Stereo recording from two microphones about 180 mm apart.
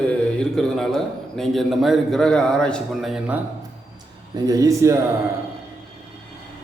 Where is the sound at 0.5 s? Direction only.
Centre (ahead or behind).